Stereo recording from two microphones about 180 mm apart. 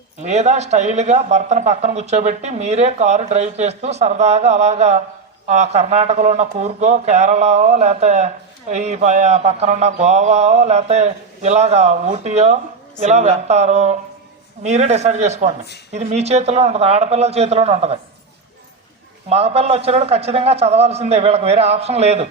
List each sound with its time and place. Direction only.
0.2 s a man's voice: 40° right (ahead or behind)
19.3 s a man's voice: 35° right (ahead or behind)